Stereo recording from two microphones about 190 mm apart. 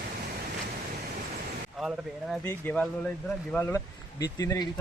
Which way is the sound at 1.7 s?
5° right (ahead or behind).